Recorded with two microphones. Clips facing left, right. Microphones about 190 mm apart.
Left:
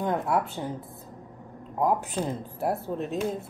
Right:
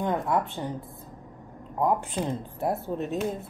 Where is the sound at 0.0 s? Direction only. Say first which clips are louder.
Even; 5° left (ahead or behind).